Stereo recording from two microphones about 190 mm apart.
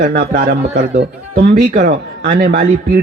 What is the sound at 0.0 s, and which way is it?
A man's voice, 55° right (ahead or behind).